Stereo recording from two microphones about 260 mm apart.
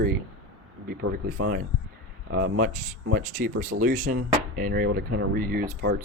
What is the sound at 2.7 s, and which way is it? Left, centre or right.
Speech, right.